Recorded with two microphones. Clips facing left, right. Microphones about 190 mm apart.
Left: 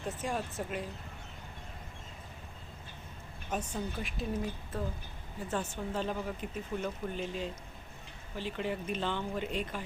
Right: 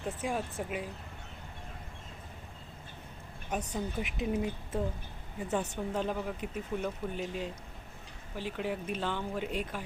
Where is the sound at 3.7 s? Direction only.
15° right (ahead or behind).